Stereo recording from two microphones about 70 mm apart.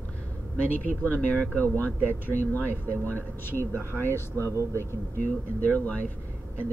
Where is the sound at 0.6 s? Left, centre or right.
Left.